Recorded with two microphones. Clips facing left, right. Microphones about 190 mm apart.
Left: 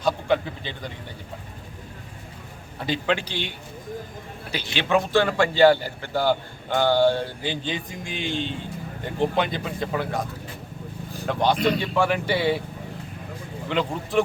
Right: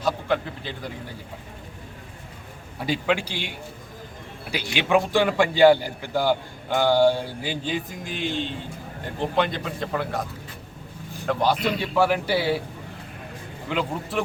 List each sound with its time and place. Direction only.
0.0 s a man's voice: centre (ahead or behind)
2.7 s a man's voice: 10° right (ahead or behind)
4.5 s a man's voice: 10° right (ahead or behind)
11.3 s speech: 5° right (ahead or behind)
13.7 s speech: 5° right (ahead or behind)